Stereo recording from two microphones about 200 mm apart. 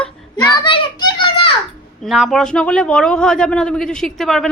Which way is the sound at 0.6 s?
25° left (ahead or behind).